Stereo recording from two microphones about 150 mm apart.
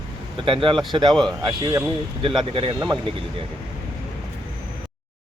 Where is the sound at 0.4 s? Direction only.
35° right (ahead or behind).